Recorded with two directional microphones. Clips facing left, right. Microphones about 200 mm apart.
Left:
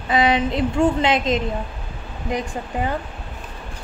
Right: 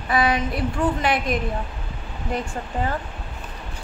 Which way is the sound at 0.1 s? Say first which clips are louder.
Left 3 dB; 20° left (ahead or behind).